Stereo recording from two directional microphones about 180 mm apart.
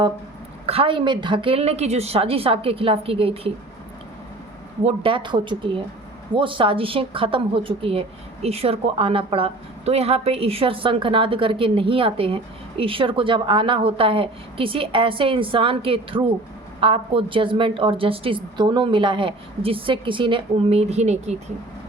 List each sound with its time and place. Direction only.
0.6 s a woman's voice: 30° right (ahead or behind)
4.8 s speech: 35° right (ahead or behind)